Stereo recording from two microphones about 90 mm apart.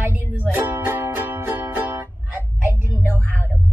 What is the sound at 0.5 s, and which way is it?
Music, 30° right (ahead or behind).